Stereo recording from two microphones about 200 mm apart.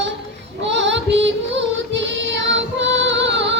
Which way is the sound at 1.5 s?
65° right (ahead or behind).